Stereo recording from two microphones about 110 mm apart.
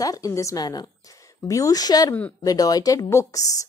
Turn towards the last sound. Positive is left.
turn(degrees=30)  # may be behind; listen again after turning